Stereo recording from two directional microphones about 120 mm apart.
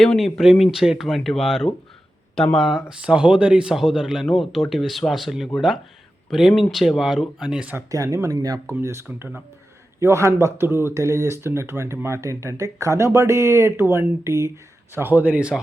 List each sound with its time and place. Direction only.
0.0 s speech: 5° left (ahead or behind); by 7.9 s 10° right (ahead or behind)
7.9 s speech: 25° right (ahead or behind); by 15.6 s 10° right (ahead or behind)